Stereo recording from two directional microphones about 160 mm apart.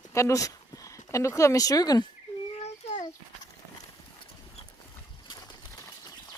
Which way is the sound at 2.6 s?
45° left (ahead or behind).